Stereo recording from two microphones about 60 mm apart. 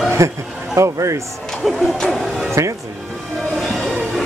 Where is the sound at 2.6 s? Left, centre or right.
Right.